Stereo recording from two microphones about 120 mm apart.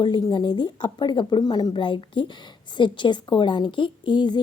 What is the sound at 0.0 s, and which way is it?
A woman's voice, 40° left (ahead or behind).